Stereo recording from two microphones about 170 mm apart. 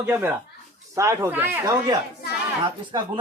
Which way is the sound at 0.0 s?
10° right (ahead or behind).